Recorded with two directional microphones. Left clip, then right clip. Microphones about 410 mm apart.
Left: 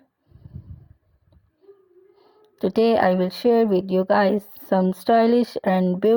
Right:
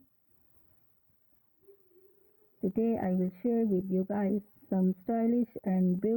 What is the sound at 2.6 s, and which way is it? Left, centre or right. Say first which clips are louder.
Speech: left 14 dB; left.